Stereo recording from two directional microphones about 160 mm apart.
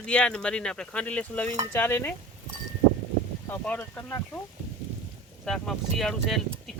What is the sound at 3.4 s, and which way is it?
Speech, 10° left (ahead or behind).